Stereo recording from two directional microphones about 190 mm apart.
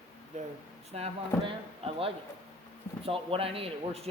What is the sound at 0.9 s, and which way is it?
Speech, 30° right (ahead or behind).